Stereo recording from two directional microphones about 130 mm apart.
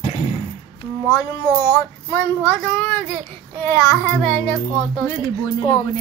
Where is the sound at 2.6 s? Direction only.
10° left (ahead or behind).